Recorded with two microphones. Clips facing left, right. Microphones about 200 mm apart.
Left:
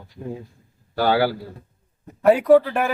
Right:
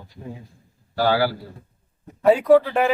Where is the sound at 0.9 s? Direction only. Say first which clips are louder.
Left 1 dB; 60° left (ahead or behind).